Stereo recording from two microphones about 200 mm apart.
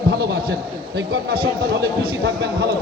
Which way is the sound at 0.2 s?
55° right (ahead or behind).